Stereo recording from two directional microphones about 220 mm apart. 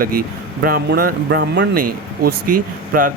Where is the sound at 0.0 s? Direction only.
40° right (ahead or behind).